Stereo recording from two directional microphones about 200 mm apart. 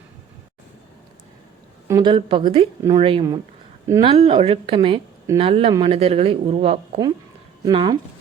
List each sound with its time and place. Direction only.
2.0 s speech: 25° right (ahead or behind)
4.1 s speech: 30° right (ahead or behind)